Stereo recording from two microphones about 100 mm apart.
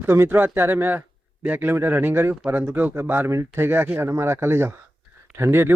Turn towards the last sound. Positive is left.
turn(degrees=-25)  # may be behind; listen again after turning